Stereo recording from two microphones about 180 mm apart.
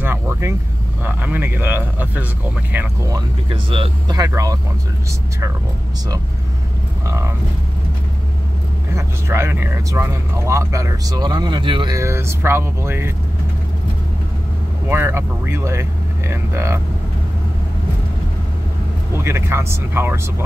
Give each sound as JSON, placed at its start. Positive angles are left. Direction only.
{"t": 0.0, "sound": "vehicle", "side_deg": -15}
{"t": 1.0, "sound": "speech", "side_deg": -10}
{"t": 3.4, "sound": "speech", "side_deg": -30}
{"t": 7.1, "sound": "speech", "side_deg": -15}
{"t": 8.9, "sound": "speech", "side_deg": -15}
{"t": 14.9, "sound": "speech", "side_deg": -10}
{"t": 19.1, "sound": "speech", "side_deg": -15}